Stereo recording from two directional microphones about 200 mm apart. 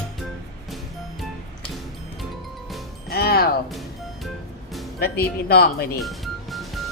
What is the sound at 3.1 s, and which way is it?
Speech, 50° left (ahead or behind).